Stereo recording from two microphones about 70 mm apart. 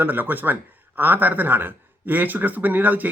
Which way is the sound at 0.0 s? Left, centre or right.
Right.